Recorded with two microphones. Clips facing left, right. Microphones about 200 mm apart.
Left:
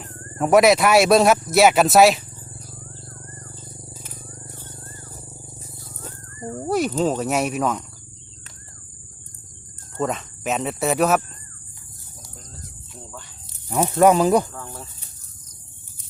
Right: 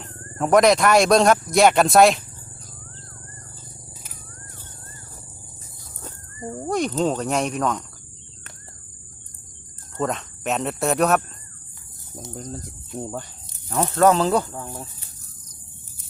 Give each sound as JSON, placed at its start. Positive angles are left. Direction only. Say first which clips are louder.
{"t": 0.0, "sound": "speech", "louder": "left 2 dB", "side_deg": 5}
{"t": 6.7, "sound": "speech", "louder": "left 1 dB", "side_deg": 5}
{"t": 10.0, "sound": "speech", "louder": "left 1 dB", "side_deg": 0}
{"t": 12.9, "sound": "speech", "louder": "right 11 dB", "side_deg": -45}
{"t": 13.7, "sound": "speech", "louder": "left 2 dB", "side_deg": 15}
{"t": 14.5, "sound": "speech", "louder": "right 3 dB", "side_deg": -15}